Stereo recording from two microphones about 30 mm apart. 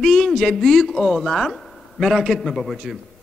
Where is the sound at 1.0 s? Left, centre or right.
Centre.